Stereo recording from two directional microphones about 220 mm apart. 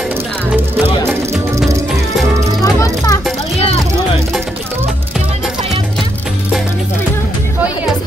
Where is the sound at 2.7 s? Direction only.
15° left (ahead or behind).